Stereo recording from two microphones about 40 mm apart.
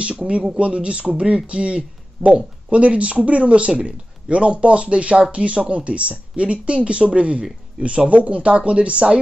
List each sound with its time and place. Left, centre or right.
0.0 s speech: right